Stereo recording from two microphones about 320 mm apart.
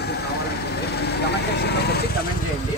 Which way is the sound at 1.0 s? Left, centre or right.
Left.